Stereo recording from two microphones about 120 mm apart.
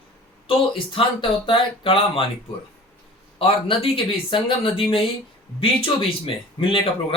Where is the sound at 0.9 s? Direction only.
45° left (ahead or behind).